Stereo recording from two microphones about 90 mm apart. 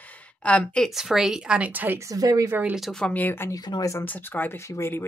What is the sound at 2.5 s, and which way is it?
Speech, 20° right (ahead or behind).